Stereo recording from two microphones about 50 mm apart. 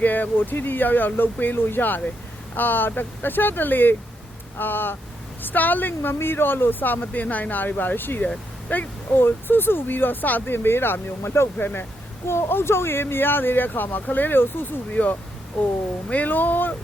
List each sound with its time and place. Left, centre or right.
0.0 s speech: left
11.5 s speech: left
12.3 s speech: left
15.0 s speech: left